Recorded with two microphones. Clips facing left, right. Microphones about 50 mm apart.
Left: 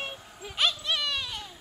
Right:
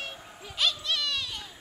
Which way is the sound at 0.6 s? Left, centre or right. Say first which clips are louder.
Left 1 dB; centre.